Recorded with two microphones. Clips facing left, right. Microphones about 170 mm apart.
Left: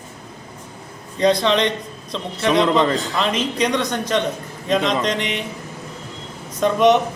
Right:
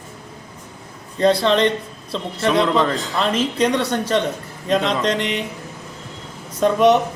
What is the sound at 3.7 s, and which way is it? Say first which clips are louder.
Speech: right 1 dB; 15° left (ahead or behind).